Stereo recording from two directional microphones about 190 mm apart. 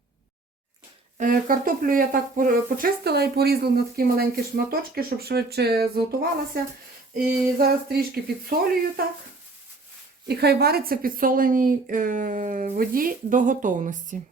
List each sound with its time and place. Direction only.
1.2 s speech: 45° right (ahead or behind)
10.2 s speech: 60° right (ahead or behind); by 14.2 s 45° right (ahead or behind)